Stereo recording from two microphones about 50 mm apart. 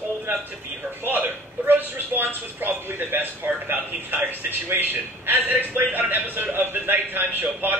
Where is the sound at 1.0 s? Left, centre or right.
Right.